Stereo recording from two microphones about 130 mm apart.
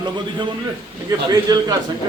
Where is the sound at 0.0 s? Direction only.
35° right (ahead or behind).